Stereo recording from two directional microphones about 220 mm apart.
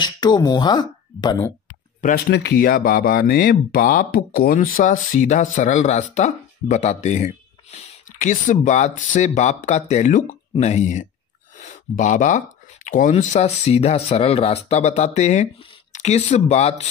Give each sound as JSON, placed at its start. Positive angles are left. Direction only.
{"t": 0.0, "sound": "speech", "side_deg": 20}
{"t": 2.0, "sound": "speech", "side_deg": 40}